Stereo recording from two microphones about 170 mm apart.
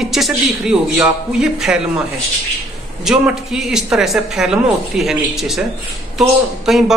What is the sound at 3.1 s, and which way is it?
Speech, 5° right (ahead or behind).